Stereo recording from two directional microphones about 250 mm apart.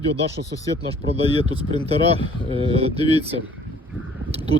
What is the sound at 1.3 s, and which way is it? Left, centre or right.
Speech, centre.